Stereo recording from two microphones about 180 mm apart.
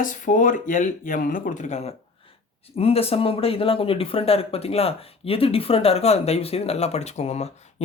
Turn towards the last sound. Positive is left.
turn(degrees=35)  # may be behind; listen again after turning